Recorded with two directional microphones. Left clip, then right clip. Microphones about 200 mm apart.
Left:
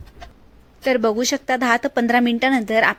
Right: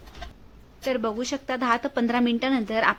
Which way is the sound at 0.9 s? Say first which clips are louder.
Left 8 dB; 25° left (ahead or behind).